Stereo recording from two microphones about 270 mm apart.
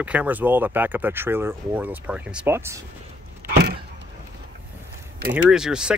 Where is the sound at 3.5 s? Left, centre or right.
Right.